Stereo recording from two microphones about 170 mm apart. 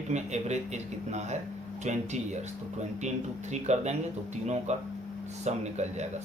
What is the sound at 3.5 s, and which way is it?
A man's voice, 40° right (ahead or behind).